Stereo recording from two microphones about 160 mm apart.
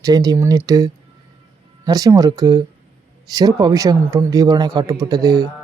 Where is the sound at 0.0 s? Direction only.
20° right (ahead or behind).